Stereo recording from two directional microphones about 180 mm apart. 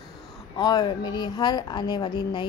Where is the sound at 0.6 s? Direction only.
25° left (ahead or behind).